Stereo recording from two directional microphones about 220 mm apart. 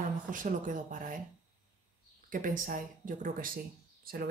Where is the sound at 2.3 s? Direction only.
40° right (ahead or behind).